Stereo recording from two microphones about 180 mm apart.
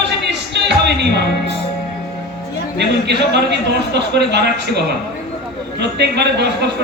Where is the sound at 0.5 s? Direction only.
70° right (ahead or behind).